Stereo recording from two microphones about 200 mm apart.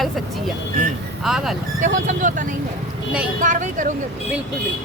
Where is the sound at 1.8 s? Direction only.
40° right (ahead or behind).